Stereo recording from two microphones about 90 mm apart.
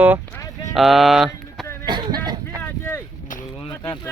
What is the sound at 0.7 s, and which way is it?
Speech, centre (ahead or behind).